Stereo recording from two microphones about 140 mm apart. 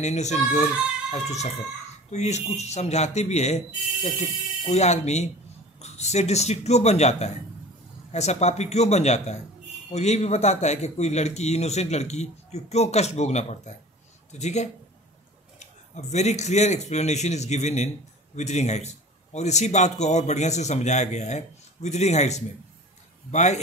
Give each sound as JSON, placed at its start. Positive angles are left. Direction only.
{"t": 0.0, "sound": "a man's voice", "side_deg": 55}
{"t": 15.9, "sound": "a man's voice", "side_deg": 55}